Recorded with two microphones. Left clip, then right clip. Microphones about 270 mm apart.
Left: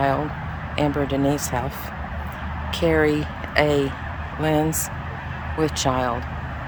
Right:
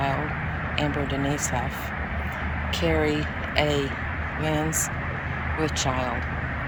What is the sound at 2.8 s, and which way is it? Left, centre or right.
Speech, centre.